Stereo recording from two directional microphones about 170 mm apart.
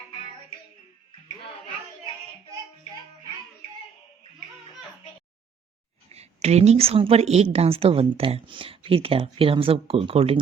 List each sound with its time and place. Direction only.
6.1 s a woman's voice: 40° right (ahead or behind)